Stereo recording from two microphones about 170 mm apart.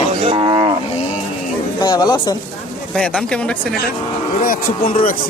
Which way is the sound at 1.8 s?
25° left (ahead or behind).